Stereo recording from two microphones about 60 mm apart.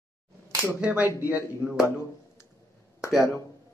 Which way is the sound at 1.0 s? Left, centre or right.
Right.